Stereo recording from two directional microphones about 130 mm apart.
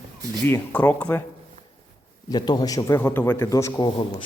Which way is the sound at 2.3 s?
30° left (ahead or behind).